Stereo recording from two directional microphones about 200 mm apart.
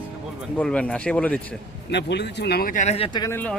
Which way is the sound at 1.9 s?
60° left (ahead or behind).